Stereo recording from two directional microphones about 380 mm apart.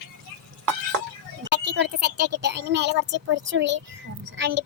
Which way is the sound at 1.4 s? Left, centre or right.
Right.